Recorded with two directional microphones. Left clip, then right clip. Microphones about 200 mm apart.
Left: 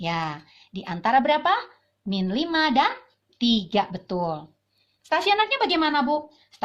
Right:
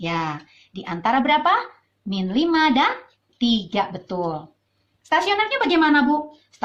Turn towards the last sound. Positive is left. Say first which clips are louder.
# right 5 dB
turn(degrees=50)  # may be behind; listen again after turning